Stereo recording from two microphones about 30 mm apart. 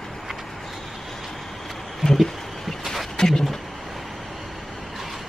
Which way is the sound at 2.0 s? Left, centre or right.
Centre.